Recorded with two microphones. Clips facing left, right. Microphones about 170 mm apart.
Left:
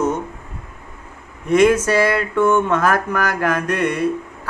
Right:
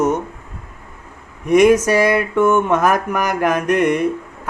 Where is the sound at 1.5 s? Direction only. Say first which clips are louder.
Right 2 dB; 15° right (ahead or behind).